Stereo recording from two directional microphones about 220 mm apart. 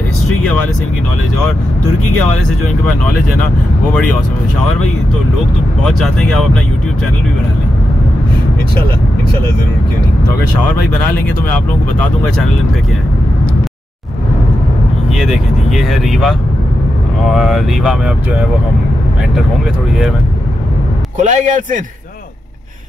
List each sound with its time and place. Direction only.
5.9 s speech: centre (ahead or behind)
15.1 s speech: centre (ahead or behind)
21.2 s a man's voice: 35° right (ahead or behind)